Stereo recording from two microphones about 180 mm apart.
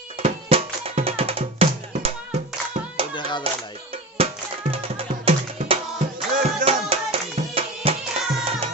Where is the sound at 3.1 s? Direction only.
25° left (ahead or behind).